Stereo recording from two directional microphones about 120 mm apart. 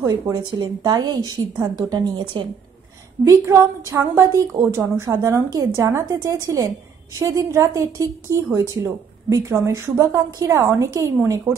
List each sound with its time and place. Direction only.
0.0 s a woman's voice: 25° right (ahead or behind)
0.6 s a woman's voice: 35° right (ahead or behind)
3.3 s a woman's voice: 25° right (ahead or behind)